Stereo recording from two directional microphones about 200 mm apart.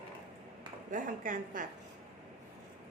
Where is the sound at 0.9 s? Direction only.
40° right (ahead or behind).